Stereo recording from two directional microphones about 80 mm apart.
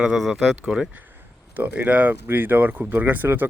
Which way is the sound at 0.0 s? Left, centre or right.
Centre.